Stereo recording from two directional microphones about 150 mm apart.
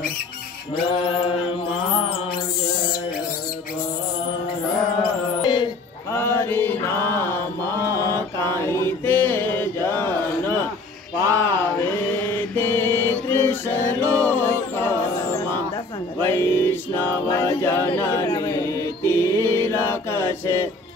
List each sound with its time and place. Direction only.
0.8 s mantra: 35° left (ahead or behind)
5.0 s music: 30° left (ahead or behind)
6.1 s mantra: 15° left (ahead or behind)
14.2 s a sound: 15° left (ahead or behind)
16.2 s music: 15° left (ahead or behind)
17.3 s a capella: 15° left (ahead or behind)
18.2 s chant: 30° left (ahead or behind)